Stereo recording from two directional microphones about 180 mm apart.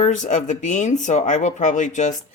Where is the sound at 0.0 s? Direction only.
40° left (ahead or behind).